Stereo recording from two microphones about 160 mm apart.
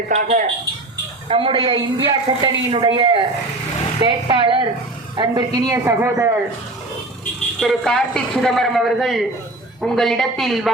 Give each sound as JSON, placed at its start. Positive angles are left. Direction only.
{"t": 0.1, "sound": "a woman's voice", "side_deg": -45}
{"t": 7.6, "sound": "a man's voice", "side_deg": 5}